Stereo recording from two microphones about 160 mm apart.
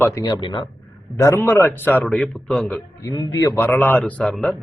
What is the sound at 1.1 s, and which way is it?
A man's voice, 15° left (ahead or behind).